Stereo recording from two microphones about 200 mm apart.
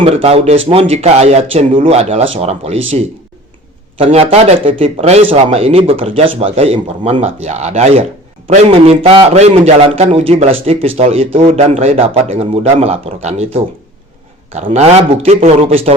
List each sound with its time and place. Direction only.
0.0 s a man's voice: 30° right (ahead or behind)
3.9 s a man's voice: 30° right (ahead or behind)